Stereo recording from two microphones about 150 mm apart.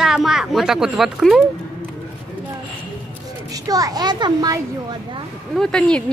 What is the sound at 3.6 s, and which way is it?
Speech, 25° right (ahead or behind).